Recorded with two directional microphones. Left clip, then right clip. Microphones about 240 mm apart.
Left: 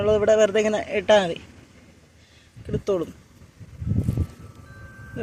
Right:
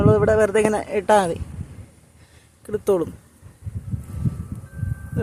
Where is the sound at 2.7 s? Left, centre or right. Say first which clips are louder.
Right 4 dB; centre.